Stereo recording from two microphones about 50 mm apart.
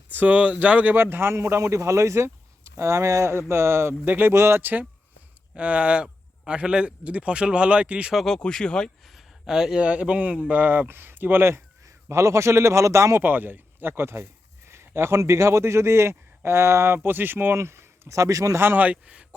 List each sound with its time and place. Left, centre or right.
0.3 s speech: right
0.9 s a man's voice: right
3.5 s speech: right
4.4 s a man's voice: right
5.5 s speech: right
8.1 s speech: centre
8.4 s speech: centre
9.0 s a sound: centre
9.9 s speech: right
10.6 s speech: right
11.5 s a man's voice: right
13.2 s a man's voice: right
18.8 s a man's voice: right